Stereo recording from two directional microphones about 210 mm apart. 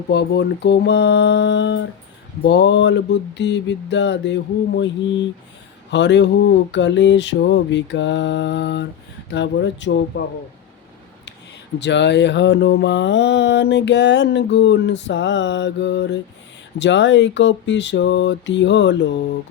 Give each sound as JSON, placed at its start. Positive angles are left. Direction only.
{"t": 0.1, "sound": "mantra", "side_deg": 55}
{"t": 11.8, "sound": "mantra", "side_deg": 55}